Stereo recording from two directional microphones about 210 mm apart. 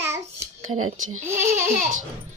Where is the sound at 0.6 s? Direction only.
85° right.